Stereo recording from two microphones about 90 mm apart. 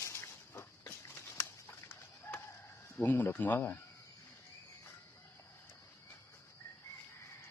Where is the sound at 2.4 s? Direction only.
30° left (ahead or behind).